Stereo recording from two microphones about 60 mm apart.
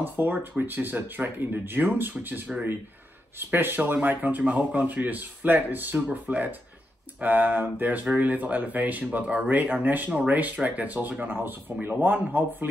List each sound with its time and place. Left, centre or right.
0.0 s speech: right